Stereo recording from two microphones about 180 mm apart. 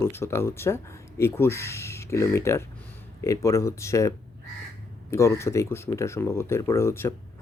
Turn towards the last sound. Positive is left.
turn(degrees=15)  # may be behind; listen again after turning